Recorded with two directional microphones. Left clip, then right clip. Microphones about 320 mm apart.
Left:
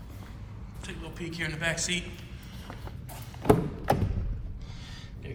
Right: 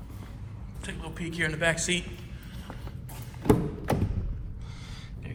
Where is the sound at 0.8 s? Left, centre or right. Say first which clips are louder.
Right 2 dB; centre.